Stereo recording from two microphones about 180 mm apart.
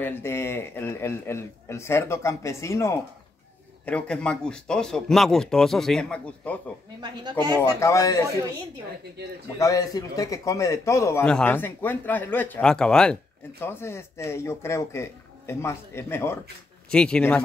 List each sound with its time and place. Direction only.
0.0 s speech: 15° left (ahead or behind)
3.8 s speech: 5° left (ahead or behind)
7.0 s speech: 25° right (ahead or behind)
7.6 s speech: 15° left (ahead or behind)
9.6 s speech: 20° left (ahead or behind)